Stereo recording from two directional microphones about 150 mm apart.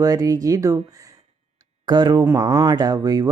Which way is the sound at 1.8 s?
30° right (ahead or behind).